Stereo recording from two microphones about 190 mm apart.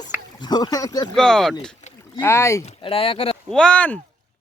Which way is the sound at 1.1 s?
5° left (ahead or behind).